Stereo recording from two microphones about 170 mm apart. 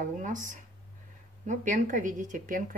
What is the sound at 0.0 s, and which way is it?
Speech, 50° right (ahead or behind).